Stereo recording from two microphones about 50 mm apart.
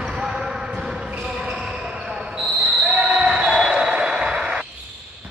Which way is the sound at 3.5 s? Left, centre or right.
Centre.